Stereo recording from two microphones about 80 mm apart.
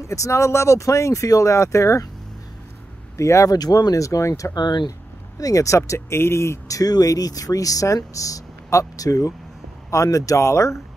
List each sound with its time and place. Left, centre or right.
0.0 s speech: left
3.2 s speech: left
3.5 s speech: left
4.6 s speech: left
5.4 s speech: left
6.8 s speech: left